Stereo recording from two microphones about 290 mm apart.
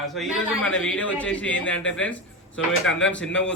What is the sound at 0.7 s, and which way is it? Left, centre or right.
A man's voice, centre.